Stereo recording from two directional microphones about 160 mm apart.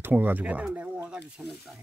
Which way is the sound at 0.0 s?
10° right (ahead or behind).